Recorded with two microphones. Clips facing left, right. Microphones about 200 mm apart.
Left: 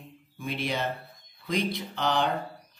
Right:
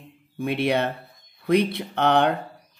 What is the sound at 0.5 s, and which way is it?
Speech, 65° right (ahead or behind).